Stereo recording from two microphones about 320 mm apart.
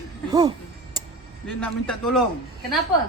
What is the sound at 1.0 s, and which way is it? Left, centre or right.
Tick, centre.